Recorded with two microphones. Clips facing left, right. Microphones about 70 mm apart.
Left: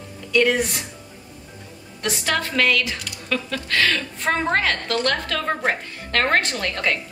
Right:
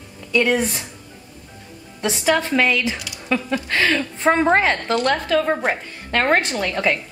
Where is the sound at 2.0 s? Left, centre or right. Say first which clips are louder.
Right 5 dB; centre.